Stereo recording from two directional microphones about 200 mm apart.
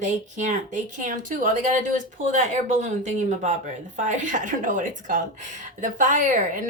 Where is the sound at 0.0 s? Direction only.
40° right (ahead or behind).